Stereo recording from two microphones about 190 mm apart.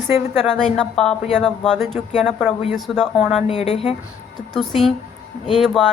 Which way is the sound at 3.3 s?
35° left (ahead or behind).